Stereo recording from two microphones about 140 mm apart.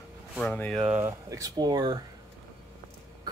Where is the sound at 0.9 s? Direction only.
20° right (ahead or behind).